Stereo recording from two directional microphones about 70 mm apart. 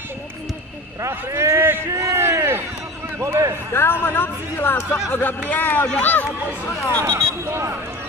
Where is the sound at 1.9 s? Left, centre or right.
Right.